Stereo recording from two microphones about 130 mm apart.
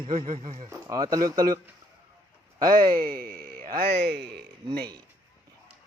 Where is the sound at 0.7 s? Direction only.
30° right (ahead or behind).